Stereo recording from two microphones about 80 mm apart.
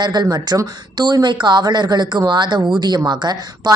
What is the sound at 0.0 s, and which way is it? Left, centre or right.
Speech, right.